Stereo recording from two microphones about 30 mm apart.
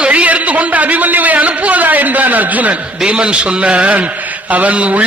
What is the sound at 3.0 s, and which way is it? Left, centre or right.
A man's voice, right.